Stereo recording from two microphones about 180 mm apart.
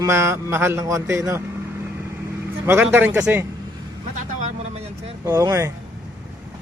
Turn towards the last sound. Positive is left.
turn(degrees=-15)  # may be behind; listen again after turning